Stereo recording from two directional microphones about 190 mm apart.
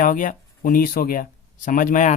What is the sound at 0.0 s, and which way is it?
Speech, 45° left (ahead or behind).